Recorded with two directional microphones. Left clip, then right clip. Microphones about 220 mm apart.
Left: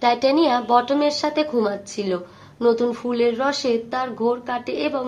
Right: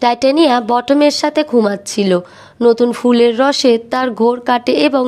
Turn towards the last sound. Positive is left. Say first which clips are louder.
# right 11 dB
turn(degrees=-45)  # may be behind; listen again after turning